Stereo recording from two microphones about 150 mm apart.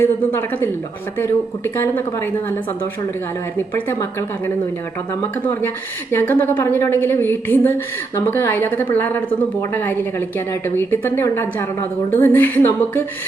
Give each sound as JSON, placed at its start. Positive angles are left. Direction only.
{"t": 0.0, "sound": "a woman's voice", "side_deg": 15}
{"t": 5.5, "sound": "a woman's voice", "side_deg": 15}